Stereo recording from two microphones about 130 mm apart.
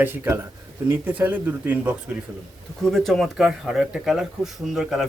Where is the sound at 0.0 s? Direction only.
15° right (ahead or behind).